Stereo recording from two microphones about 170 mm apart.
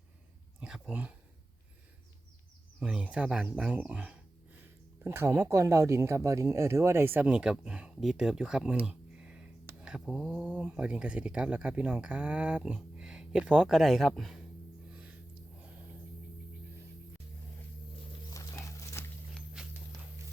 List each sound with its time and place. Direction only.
0.6 s speech: 5° right (ahead or behind)
2.8 s speech: 5° right (ahead or behind)
8.9 s a sound: 5° right (ahead or behind)
9.8 s speech: 5° right (ahead or behind)
18.3 s horse: 15° left (ahead or behind)
19.6 s walk: 5° right (ahead or behind)